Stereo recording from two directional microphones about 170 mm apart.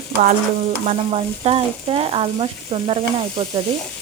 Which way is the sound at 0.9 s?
35° right (ahead or behind).